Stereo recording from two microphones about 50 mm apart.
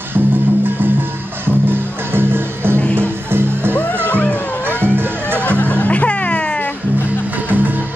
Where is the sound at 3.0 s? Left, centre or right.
Right.